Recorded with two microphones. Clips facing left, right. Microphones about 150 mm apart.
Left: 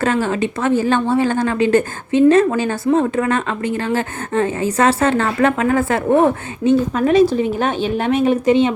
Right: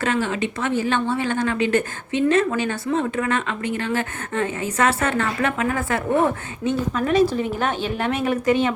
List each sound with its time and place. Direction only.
0.0 s a woman's voice: 40° left (ahead or behind); by 8.7 s 20° left (ahead or behind)